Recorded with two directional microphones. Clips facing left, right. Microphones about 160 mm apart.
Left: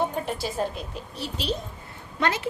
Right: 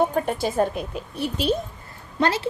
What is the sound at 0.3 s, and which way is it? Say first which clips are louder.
A woman's voice: right 6 dB; 55° right (ahead or behind).